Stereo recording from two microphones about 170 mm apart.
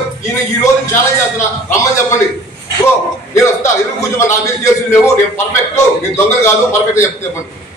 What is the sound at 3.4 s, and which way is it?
A man's voice, 15° left (ahead or behind).